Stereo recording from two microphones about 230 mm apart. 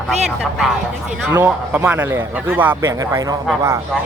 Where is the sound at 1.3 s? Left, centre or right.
Centre.